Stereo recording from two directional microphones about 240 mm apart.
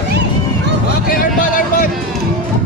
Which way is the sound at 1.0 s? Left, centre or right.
Left.